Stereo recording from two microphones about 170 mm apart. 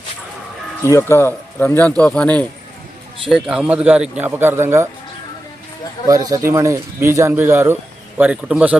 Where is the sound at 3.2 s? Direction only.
5° right (ahead or behind).